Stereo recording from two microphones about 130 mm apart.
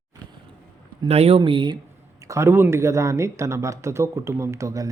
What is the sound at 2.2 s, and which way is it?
Speech, 25° right (ahead or behind).